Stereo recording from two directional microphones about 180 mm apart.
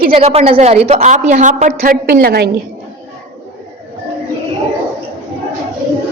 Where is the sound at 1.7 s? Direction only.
55° right (ahead or behind).